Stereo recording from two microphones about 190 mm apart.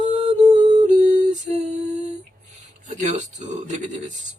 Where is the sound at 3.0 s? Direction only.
40° right (ahead or behind).